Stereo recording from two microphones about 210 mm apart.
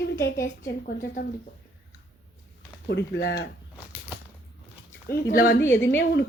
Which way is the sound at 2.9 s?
55° left (ahead or behind).